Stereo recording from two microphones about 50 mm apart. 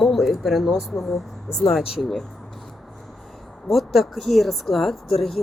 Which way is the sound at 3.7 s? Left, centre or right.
Centre.